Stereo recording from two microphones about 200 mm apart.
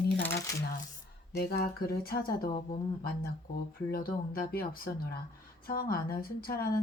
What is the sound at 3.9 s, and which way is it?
A woman's voice, 45° left (ahead or behind).